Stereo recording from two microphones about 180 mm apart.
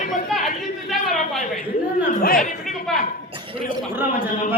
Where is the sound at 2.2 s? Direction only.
50° left (ahead or behind).